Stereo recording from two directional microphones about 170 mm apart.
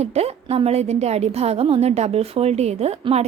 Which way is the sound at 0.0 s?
40° right (ahead or behind).